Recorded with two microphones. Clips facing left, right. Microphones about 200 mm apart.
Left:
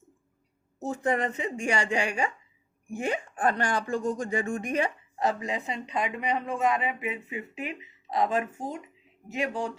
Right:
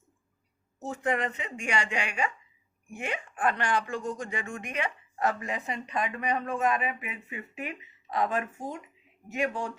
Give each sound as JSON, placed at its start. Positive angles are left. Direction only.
{"t": 0.9, "sound": "speech", "side_deg": 35}
{"t": 5.6, "sound": "a woman's voice", "side_deg": 20}
{"t": 6.7, "sound": "speech", "side_deg": 25}